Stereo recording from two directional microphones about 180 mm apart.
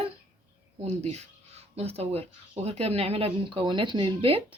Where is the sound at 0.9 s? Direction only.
35° right (ahead or behind).